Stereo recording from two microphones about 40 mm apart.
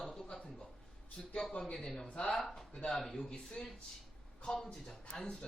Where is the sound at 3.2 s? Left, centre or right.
Centre.